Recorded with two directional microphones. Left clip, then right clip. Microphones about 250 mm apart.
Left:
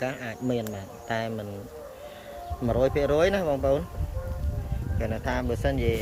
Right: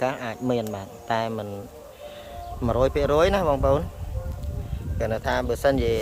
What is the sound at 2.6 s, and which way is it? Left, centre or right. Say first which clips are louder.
Speech: right 2 dB; centre.